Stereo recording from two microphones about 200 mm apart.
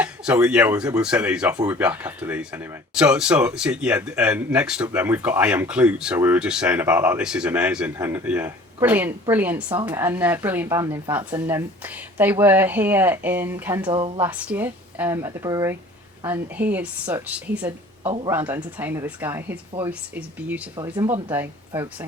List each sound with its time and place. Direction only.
0.0 s speech: 5° right (ahead or behind)
18.0 s speech: 25° right (ahead or behind)
18.3 s speech: 10° right (ahead or behind)